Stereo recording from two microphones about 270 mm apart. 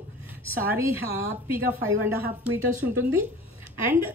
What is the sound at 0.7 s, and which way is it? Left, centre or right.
Speech, centre.